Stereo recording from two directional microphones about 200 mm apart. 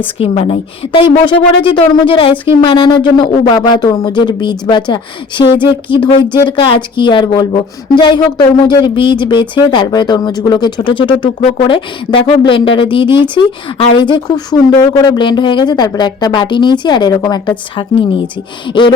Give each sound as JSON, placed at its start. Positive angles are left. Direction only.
{"t": 0.2, "sound": "speech", "side_deg": 30}